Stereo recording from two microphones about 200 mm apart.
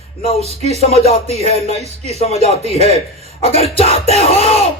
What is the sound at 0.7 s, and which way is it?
Speech, 30° left (ahead or behind).